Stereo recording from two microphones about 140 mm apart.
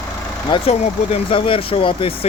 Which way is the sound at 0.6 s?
45° left (ahead or behind).